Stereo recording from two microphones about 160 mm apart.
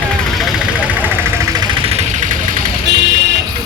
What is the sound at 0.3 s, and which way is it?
Vehicle, 5° right (ahead or behind).